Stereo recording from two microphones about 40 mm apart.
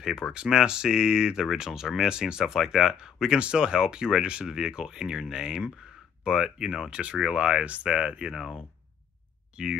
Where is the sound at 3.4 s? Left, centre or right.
Right.